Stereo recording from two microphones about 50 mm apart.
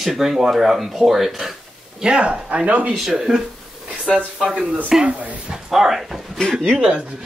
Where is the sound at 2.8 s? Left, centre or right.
Centre.